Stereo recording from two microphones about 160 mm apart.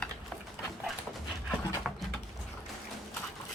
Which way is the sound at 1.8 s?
Centre (ahead or behind).